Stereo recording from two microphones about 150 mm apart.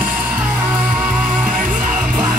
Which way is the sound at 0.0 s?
10° right (ahead or behind).